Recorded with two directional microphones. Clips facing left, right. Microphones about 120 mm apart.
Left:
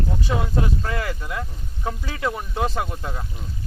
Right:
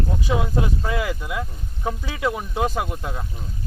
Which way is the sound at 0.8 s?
10° right (ahead or behind).